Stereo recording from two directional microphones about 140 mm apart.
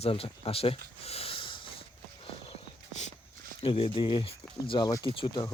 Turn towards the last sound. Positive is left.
turn(degrees=35)  # may be behind; listen again after turning